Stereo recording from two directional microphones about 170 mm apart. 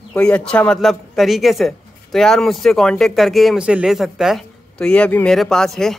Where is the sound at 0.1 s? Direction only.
5° left (ahead or behind).